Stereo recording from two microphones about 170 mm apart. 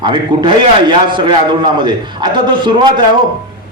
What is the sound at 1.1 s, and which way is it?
A man's voice, 25° right (ahead or behind).